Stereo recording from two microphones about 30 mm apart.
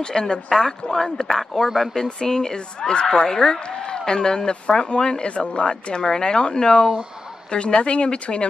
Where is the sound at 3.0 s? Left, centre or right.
Centre.